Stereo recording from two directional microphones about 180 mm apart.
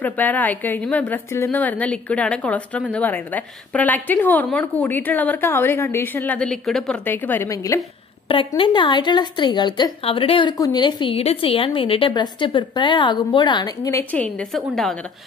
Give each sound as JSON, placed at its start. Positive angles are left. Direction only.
{"t": 0.0, "sound": "a woman's voice", "side_deg": 10}
{"t": 14.1, "sound": "a woman's voice", "side_deg": 5}